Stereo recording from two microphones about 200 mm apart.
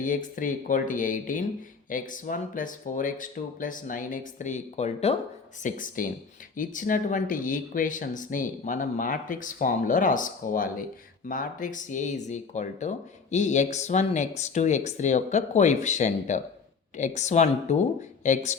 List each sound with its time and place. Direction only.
0.0 s speech: 40° left (ahead or behind)